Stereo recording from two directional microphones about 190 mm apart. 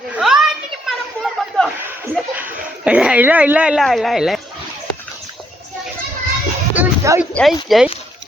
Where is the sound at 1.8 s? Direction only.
10° right (ahead or behind).